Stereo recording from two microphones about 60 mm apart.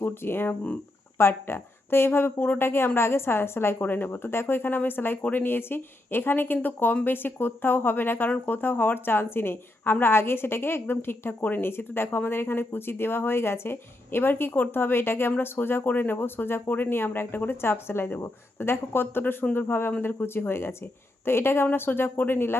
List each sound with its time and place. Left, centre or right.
0.0 s a woman's voice: left